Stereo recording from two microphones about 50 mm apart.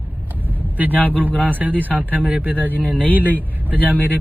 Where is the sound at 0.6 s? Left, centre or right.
Right.